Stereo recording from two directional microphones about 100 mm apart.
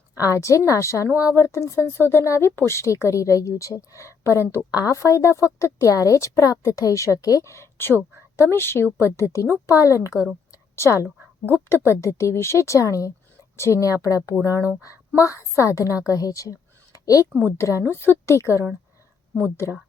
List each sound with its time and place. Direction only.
0.3 s a woman's voice: 30° left (ahead or behind)
10.1 s a woman's voice: 10° right (ahead or behind)
10.5 s a sound: 30° left (ahead or behind)
11.5 s a woman's voice: 25° left (ahead or behind)
14.5 s speech: 20° right (ahead or behind)
15.1 s a woman's voice: 30° left (ahead or behind)